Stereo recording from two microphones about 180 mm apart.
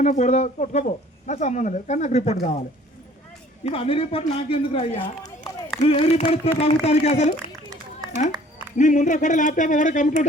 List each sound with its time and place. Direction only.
0.0 s speech: 40° left (ahead or behind)
3.6 s speech: 30° left (ahead or behind)
8.8 s speech: 45° left (ahead or behind)